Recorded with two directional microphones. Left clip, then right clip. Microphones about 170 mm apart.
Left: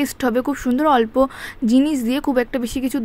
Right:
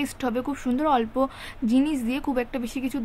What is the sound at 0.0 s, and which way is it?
A woman's voice, 30° left (ahead or behind).